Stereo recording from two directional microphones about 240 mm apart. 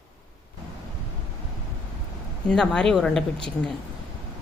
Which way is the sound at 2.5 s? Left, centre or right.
Centre.